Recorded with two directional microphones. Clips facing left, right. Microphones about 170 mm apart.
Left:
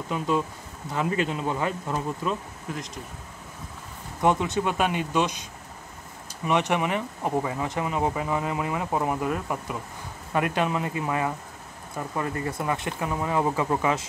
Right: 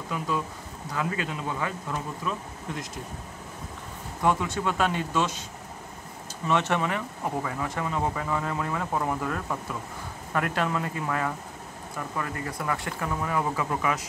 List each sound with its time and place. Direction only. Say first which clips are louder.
0.1 s speech: left 4 dB; 25° left (ahead or behind)
4.2 s speech: left 3 dB; 20° left (ahead or behind)
6.4 s speech: left 1 dB; 15° left (ahead or behind)